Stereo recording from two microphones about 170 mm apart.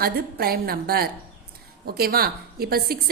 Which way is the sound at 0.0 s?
60° right (ahead or behind).